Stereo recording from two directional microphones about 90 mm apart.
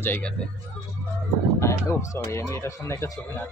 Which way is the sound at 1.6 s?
35° left (ahead or behind).